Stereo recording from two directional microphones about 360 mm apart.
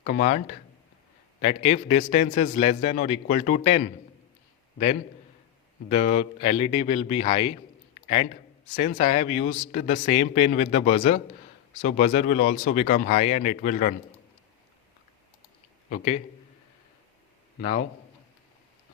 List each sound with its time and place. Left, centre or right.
0.0 s a man's voice: left
5.9 s a man's voice: centre
15.9 s a man's voice: centre
17.6 s a man's voice: centre